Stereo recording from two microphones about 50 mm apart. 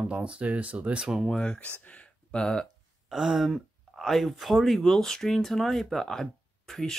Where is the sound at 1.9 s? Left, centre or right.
Left.